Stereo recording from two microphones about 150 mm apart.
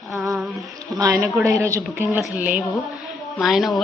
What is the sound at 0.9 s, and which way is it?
A woman's voice, 25° right (ahead or behind).